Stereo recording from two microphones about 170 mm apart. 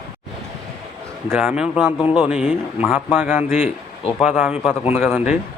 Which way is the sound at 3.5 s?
45° left (ahead or behind).